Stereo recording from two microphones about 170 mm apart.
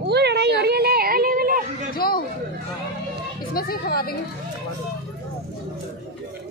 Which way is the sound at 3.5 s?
60° left (ahead or behind).